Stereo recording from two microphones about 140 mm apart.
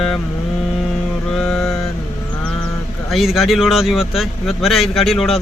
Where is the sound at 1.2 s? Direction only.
5° left (ahead or behind).